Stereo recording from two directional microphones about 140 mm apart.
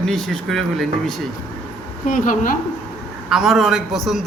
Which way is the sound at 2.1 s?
70° left (ahead or behind).